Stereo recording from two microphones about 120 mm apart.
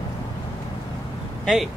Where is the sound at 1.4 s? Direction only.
Centre (ahead or behind).